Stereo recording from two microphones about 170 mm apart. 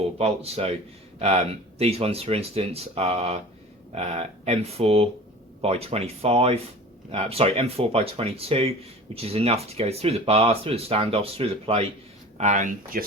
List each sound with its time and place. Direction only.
0.2 s speech: 35° right (ahead or behind)
1.8 s speech: 35° right (ahead or behind)
12.4 s speech: 45° right (ahead or behind)